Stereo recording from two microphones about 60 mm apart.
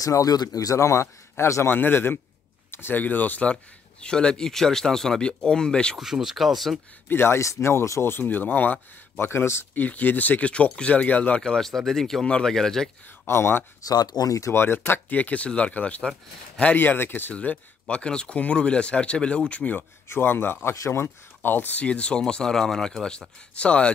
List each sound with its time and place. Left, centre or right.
0.0 s speech: left
0.7 s speech: left
3.0 s speech: left
4.0 s speech: centre
5.9 s speech: centre
7.1 s speech: left
8.1 s speech: left
9.8 s speech: left
11.4 s speech: centre
13.3 s speech: left
13.8 s speech: left
14.5 s speech: left
16.7 s speech: left
20.1 s speech: left; by 23.9 s centre